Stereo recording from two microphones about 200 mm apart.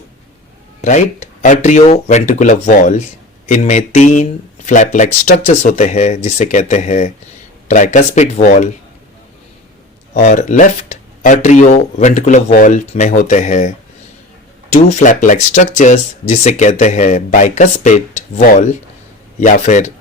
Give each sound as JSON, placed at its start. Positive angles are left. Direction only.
{"t": 0.8, "sound": "speech", "side_deg": 35}
{"t": 10.2, "sound": "speech", "side_deg": 40}
{"t": 14.7, "sound": "speech", "side_deg": 35}